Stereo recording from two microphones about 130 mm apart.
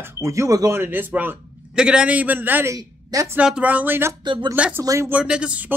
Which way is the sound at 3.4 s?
10° right (ahead or behind).